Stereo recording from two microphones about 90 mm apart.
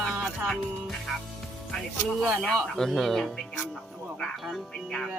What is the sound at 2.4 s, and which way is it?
Speech, 5° left (ahead or behind).